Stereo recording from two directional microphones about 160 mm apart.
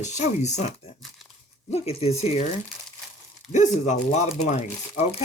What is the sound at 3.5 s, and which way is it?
Speech, 50° left (ahead or behind).